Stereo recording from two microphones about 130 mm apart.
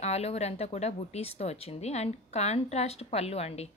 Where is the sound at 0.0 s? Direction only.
55° left (ahead or behind).